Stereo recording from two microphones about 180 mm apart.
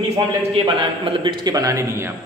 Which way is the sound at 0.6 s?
30° right (ahead or behind).